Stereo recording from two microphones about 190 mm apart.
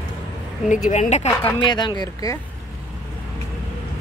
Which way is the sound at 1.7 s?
25° left (ahead or behind).